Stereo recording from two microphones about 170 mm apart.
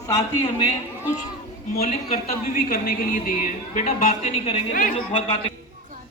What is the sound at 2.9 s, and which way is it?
Speech, 50° left (ahead or behind).